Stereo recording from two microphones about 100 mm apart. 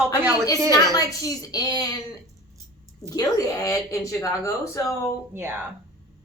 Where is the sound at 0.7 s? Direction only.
35° left (ahead or behind).